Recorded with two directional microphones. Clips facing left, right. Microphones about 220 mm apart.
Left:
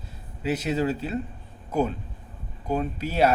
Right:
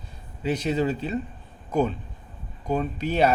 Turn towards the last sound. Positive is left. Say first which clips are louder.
# right 1 dB
turn(degrees=5)  # may be behind; listen again after turning